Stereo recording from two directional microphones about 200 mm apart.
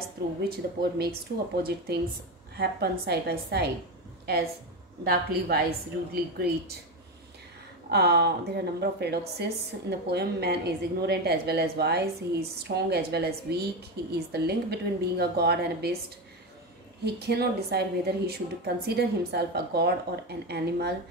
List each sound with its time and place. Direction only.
0.4 s a woman's voice: 50° right (ahead or behind)
5.0 s a woman's voice: 50° right (ahead or behind)
7.9 s a woman's voice: 55° right (ahead or behind)
17.0 s a woman's voice: 55° right (ahead or behind)